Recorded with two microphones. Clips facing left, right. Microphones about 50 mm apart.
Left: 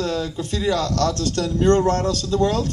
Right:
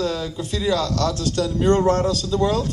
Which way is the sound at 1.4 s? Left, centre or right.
Centre.